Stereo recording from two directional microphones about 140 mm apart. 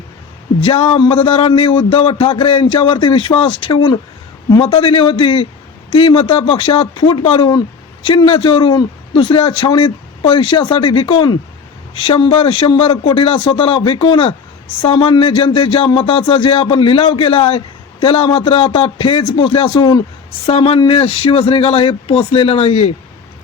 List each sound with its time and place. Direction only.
0.6 s speech: 45° left (ahead or behind)